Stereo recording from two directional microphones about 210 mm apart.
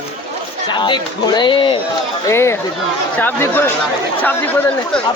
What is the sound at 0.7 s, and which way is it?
Speech, 20° left (ahead or behind).